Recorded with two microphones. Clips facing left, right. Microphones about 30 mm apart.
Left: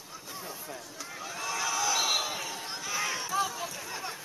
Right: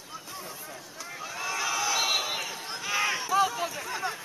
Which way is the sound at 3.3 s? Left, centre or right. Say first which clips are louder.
Right 6 dB; right.